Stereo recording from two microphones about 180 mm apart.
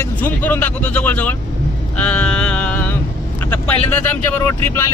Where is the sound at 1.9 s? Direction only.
5° left (ahead or behind).